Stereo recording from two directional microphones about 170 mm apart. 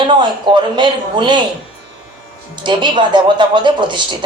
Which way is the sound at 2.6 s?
25° right (ahead or behind).